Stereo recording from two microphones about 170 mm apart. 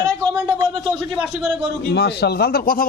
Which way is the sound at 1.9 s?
75° left (ahead or behind).